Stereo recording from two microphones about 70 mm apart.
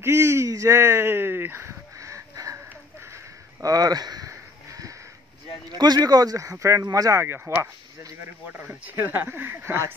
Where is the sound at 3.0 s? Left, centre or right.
Right.